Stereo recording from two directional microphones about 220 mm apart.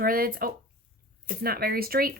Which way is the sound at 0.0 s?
40° right (ahead or behind).